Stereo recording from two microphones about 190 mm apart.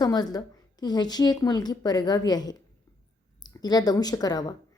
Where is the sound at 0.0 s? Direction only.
20° left (ahead or behind).